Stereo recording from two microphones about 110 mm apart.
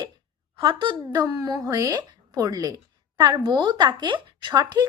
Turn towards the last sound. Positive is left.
turn(degrees=-40)  # may be behind; listen again after turning